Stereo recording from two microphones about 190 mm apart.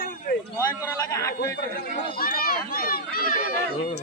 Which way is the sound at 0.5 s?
15° left (ahead or behind).